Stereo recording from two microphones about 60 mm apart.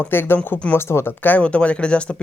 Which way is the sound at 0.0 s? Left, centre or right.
Left.